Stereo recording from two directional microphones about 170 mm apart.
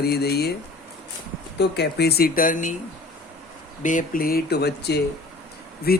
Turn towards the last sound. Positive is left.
turn(degrees=65)  # may be behind; listen again after turning